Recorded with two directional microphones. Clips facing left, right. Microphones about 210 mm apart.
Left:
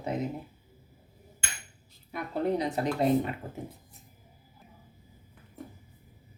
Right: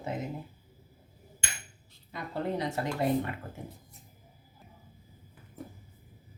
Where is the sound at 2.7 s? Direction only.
20° left (ahead or behind).